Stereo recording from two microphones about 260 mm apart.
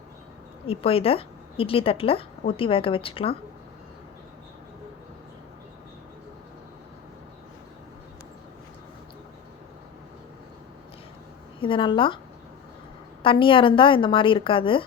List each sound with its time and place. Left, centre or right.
0.7 s a woman's voice: left
11.6 s a woman's voice: centre
13.2 s a woman's voice: centre